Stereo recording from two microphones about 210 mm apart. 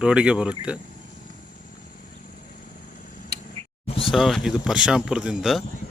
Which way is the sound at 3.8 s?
25° left (ahead or behind).